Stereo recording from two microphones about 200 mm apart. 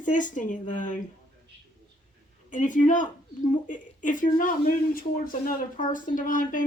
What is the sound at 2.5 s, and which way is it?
Speech, 40° left (ahead or behind).